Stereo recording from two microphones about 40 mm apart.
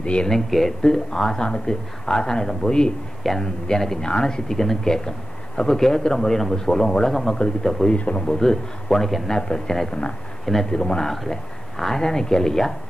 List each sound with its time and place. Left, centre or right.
0.0 s speech: left
0.3 s a man's voice: centre
10.4 s a man's voice: centre
10.7 s a man's voice: centre